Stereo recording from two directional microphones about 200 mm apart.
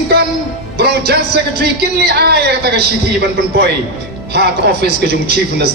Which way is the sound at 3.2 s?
55° right (ahead or behind).